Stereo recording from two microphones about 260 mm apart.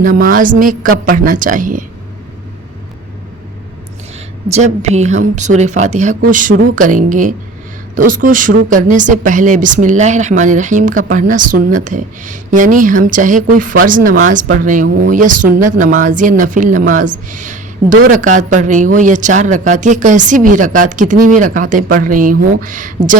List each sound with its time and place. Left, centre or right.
0.0 s speech: right
4.5 s speech: right